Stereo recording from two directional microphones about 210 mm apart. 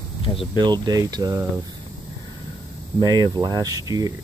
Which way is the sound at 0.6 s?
20° right (ahead or behind).